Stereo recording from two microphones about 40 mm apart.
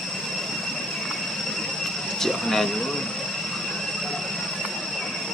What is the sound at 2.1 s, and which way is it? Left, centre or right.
Speech, centre.